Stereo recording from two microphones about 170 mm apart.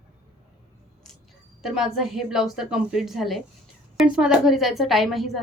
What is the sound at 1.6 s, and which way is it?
A woman's voice, centre (ahead or behind).